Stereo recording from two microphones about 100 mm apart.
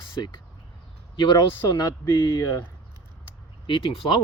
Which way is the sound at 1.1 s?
45° left (ahead or behind).